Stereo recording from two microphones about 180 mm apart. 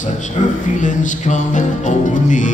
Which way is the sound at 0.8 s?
45° left (ahead or behind).